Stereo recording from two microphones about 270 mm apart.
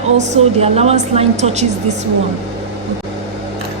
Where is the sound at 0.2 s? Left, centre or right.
Right.